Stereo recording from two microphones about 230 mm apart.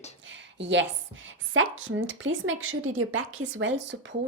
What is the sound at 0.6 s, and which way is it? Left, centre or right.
A woman's voice, right.